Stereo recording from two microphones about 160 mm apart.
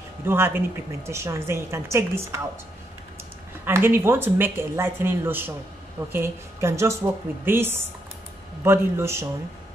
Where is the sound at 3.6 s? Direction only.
15° right (ahead or behind).